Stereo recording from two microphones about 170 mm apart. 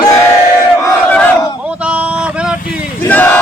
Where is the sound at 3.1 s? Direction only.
10° left (ahead or behind).